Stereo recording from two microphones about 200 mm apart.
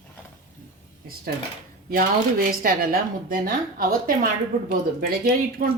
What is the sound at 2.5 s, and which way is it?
A woman's voice, 50° right (ahead or behind).